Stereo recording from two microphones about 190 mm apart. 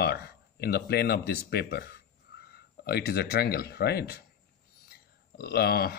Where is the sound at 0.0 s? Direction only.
55° left (ahead or behind).